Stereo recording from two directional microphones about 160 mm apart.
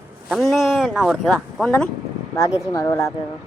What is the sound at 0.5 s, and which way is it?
Speech, centre (ahead or behind).